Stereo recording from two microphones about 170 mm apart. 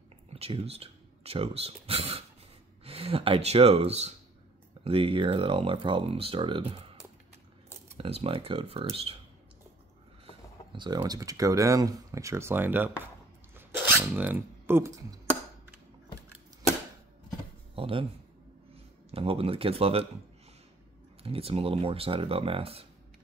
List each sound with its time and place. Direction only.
0.3 s speech: 35° right (ahead or behind)
10.7 s speech: 25° right (ahead or behind); by 13.1 s 10° right (ahead or behind)
13.6 s a sound: 15° right (ahead or behind)
17.7 s a sound: 30° right (ahead or behind)
19.0 s speech: 35° right (ahead or behind)
21.2 s speech: 35° right (ahead or behind)